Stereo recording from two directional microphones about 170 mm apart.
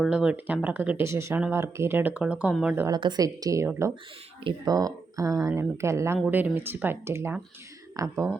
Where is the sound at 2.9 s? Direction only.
25° right (ahead or behind).